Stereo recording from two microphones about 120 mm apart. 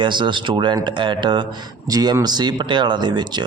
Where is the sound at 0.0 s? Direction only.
40° right (ahead or behind).